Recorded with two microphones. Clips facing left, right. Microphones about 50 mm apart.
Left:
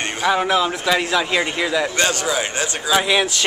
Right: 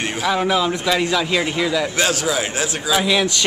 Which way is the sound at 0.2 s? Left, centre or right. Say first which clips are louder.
Left 1 dB; centre.